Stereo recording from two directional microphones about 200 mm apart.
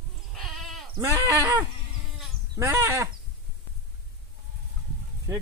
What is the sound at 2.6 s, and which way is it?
Speech, 15° right (ahead or behind).